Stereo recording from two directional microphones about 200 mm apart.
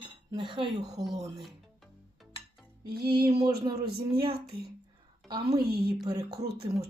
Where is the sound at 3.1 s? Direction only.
25° right (ahead or behind).